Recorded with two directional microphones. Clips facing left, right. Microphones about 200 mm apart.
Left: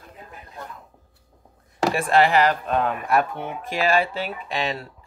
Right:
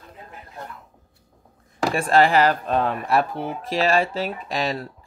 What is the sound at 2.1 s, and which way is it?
Speech, 30° right (ahead or behind).